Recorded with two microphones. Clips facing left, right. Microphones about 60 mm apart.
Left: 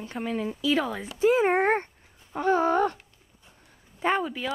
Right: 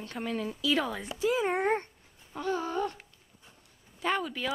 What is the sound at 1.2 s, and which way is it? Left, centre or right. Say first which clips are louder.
Speech: left 7 dB; left.